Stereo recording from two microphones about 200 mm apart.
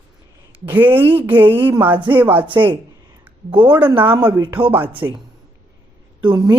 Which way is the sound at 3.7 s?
10° right (ahead or behind).